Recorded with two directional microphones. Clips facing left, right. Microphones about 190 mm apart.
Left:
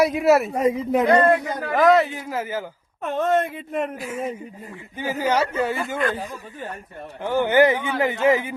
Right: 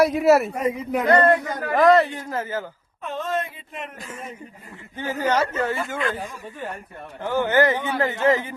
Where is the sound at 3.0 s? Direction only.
55° left (ahead or behind).